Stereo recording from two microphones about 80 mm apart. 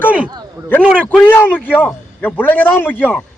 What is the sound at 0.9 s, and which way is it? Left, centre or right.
A man's voice, centre.